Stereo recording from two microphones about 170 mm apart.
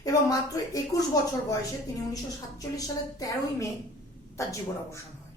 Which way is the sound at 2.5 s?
20° left (ahead or behind).